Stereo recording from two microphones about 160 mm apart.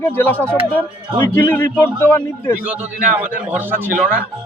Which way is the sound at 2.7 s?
10° right (ahead or behind).